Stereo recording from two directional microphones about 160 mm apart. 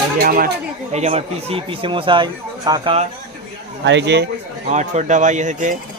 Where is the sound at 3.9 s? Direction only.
90° right.